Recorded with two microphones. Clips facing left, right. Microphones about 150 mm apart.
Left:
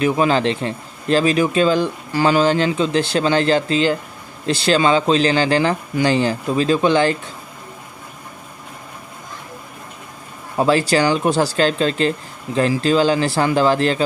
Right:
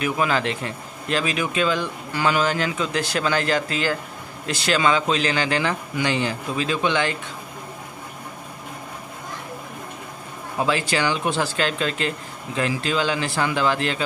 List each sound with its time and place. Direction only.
0.0 s a man's voice: 30° left (ahead or behind)
10.6 s a man's voice: 35° left (ahead or behind)